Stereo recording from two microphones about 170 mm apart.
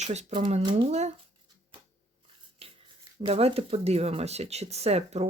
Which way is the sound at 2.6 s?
35° right (ahead or behind).